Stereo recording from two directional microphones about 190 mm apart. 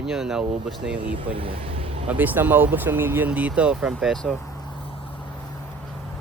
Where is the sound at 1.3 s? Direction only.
30° right (ahead or behind).